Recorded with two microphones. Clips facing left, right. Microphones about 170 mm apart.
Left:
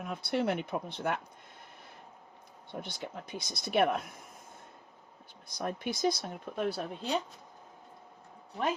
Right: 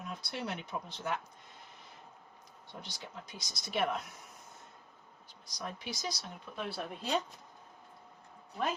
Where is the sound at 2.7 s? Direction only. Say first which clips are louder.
Left 7 dB; 55° left (ahead or behind).